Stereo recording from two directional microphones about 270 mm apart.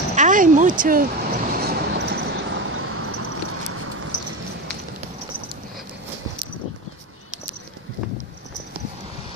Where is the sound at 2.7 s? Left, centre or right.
Right.